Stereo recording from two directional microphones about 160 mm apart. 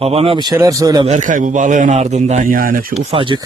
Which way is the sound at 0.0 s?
40° right (ahead or behind).